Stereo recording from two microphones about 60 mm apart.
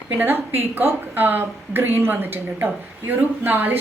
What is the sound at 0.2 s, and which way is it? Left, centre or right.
A woman's voice, right.